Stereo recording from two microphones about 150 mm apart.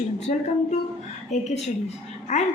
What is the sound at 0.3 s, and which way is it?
A woman's voice, 50° left (ahead or behind).